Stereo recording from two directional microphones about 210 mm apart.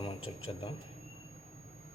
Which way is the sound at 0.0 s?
25° left (ahead or behind).